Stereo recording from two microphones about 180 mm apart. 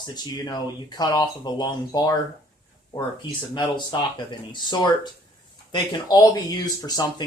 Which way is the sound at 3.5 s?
25° left (ahead or behind).